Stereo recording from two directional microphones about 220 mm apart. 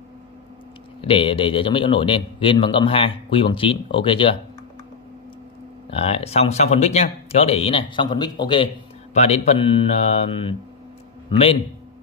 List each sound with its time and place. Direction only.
1.0 s a man's voice: 25° left (ahead or behind)
5.9 s a man's voice: 25° left (ahead or behind)